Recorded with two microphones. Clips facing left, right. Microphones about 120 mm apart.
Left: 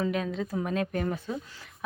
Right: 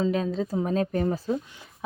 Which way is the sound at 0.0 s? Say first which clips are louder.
Right 4 dB; 30° right (ahead or behind).